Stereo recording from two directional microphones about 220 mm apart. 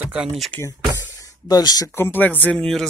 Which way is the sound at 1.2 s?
15° left (ahead or behind).